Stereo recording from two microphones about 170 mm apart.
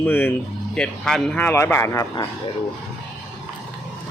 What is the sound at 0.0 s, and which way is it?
Speech, 10° left (ahead or behind).